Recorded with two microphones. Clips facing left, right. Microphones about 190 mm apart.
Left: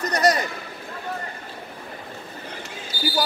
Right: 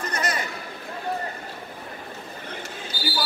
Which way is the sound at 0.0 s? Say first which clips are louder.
Left 8 dB; 40° left (ahead or behind).